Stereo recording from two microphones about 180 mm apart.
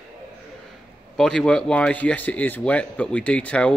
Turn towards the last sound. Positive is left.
turn(degrees=5)  # may be behind; listen again after turning